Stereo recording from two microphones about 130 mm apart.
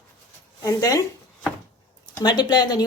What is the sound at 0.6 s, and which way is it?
Speech, 25° left (ahead or behind).